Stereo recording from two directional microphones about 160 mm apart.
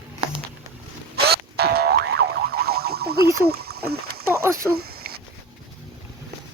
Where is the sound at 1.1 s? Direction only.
85° right.